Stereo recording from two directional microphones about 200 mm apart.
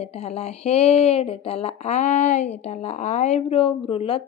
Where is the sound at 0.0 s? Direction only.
30° left (ahead or behind).